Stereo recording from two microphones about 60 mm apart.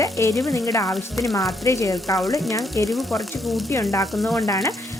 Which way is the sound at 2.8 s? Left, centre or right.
Centre.